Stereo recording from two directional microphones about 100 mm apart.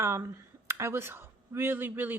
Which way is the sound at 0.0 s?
25° right (ahead or behind).